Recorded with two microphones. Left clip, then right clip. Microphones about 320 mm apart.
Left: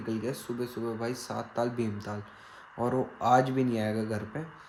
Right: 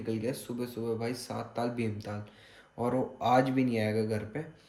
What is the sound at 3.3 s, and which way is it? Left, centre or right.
Speech, centre.